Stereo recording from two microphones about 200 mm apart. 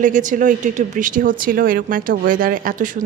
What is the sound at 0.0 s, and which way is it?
Speech, 40° right (ahead or behind).